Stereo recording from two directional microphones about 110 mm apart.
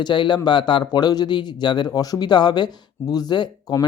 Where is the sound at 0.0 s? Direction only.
45° left (ahead or behind).